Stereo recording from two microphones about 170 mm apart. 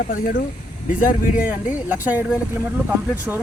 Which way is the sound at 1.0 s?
50° left (ahead or behind).